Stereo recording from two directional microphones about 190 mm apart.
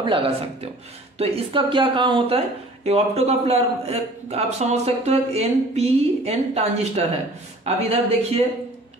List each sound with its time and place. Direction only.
0.0 s speech: 25° right (ahead or behind)